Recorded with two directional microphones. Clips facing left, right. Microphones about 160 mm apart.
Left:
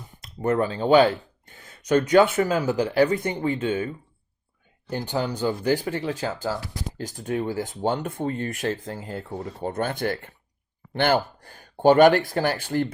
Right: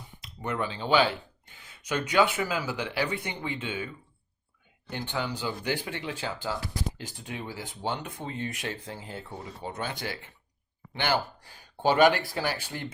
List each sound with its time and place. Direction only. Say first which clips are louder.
0.2 s speech: left 9 dB; 45° left (ahead or behind)